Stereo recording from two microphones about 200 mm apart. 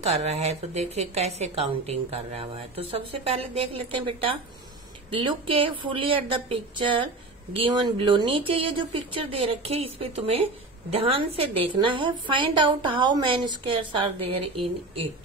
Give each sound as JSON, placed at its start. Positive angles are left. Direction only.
{"t": 0.0, "sound": "a woman's voice", "side_deg": -30}